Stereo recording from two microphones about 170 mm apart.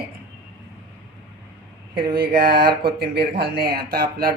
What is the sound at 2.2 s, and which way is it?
Speech, 65° right (ahead or behind).